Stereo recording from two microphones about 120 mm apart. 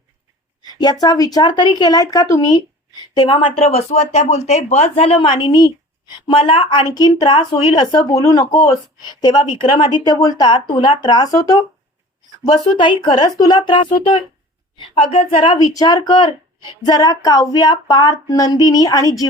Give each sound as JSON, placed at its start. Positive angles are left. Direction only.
{"t": 0.6, "sound": "a sound", "side_deg": 35}
{"t": 1.0, "sound": "speech", "side_deg": 30}
{"t": 6.2, "sound": "a woman's voice", "side_deg": 45}
{"t": 10.2, "sound": "a woman's voice", "side_deg": 30}
{"t": 15.5, "sound": "a woman's voice", "side_deg": 30}